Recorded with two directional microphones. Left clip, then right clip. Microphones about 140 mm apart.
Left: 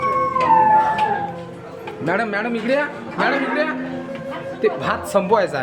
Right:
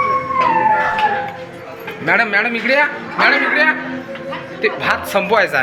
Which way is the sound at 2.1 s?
50° left (ahead or behind).